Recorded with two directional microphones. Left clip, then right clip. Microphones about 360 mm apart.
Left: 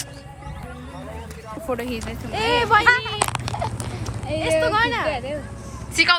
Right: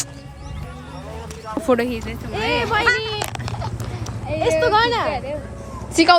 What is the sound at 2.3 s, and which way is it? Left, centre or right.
Speech, left.